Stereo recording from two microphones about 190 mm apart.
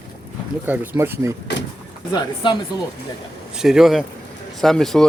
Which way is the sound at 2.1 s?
25° left (ahead or behind).